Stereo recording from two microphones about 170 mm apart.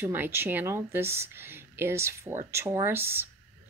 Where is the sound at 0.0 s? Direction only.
10° right (ahead or behind).